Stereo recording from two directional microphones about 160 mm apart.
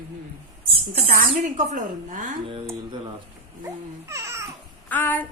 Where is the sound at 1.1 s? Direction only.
50° right (ahead or behind).